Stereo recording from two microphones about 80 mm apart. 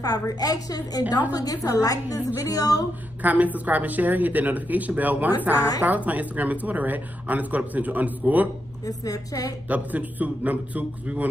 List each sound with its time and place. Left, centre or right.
0.0 s a woman's voice: left
3.2 s a woman's voice: right
8.8 s a woman's voice: left
9.7 s a woman's voice: centre